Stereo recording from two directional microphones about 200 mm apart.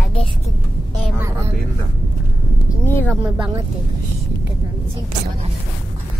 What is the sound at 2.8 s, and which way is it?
Speech, 10° left (ahead or behind).